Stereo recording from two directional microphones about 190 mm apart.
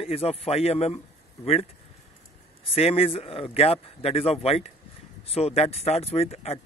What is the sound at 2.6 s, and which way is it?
Speech, 30° left (ahead or behind).